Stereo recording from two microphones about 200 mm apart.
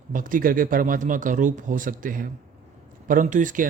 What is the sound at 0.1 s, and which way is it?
Speech, 45° right (ahead or behind).